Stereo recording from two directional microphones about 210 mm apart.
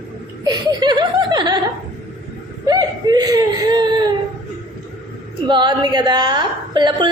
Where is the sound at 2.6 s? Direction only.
20° right (ahead or behind).